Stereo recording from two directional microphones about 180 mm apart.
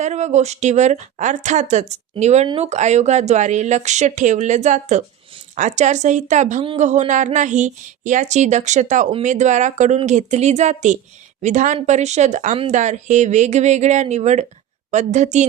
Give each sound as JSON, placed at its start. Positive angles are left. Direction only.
{"t": 0.0, "sound": "a woman's voice", "side_deg": -40}